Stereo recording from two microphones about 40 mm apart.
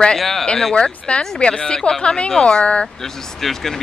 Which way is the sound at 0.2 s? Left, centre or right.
Centre.